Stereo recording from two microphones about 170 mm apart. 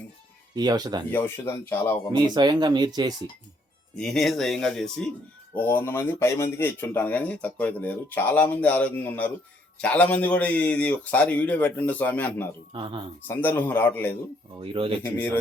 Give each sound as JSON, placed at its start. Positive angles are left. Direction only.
{"t": 0.5, "sound": "speech", "side_deg": -25}
{"t": 1.1, "sound": "speech", "side_deg": 10}
{"t": 2.1, "sound": "speech", "side_deg": -25}
{"t": 3.9, "sound": "speech", "side_deg": 5}
{"t": 12.7, "sound": "speech", "side_deg": -30}
{"t": 13.2, "sound": "speech", "side_deg": 10}
{"t": 14.6, "sound": "speech", "side_deg": -30}